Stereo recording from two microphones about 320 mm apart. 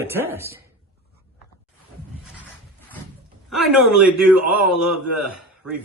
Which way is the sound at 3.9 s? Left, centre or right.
Centre.